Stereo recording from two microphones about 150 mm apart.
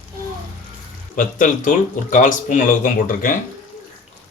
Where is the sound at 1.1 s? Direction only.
60° left (ahead or behind).